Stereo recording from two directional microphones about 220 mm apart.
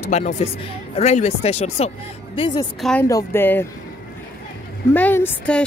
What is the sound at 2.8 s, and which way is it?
Speech, 5° left (ahead or behind).